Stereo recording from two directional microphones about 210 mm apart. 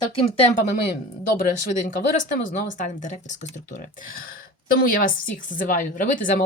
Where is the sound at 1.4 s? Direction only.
40° left (ahead or behind).